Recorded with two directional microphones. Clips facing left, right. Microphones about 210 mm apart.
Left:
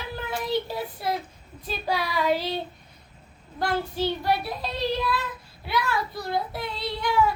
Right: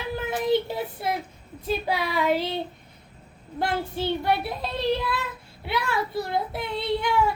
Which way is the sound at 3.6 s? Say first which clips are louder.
Left 1 dB; 25° right (ahead or behind).